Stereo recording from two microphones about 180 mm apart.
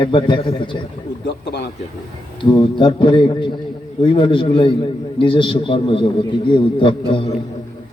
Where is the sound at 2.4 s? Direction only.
25° left (ahead or behind).